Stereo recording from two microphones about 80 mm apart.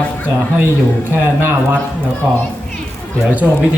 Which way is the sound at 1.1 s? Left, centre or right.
Right.